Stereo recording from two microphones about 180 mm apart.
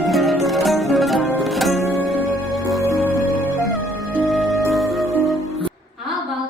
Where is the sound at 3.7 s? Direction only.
Centre (ahead or behind).